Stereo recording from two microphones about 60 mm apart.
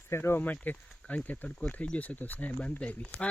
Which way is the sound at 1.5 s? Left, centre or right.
Centre.